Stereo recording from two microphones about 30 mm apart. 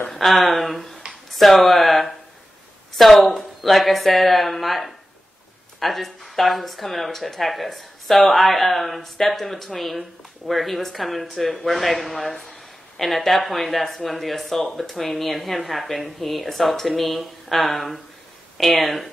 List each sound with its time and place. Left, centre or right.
0.2 s speech: centre